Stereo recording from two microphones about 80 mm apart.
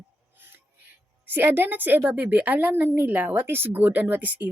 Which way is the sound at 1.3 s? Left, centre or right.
Right.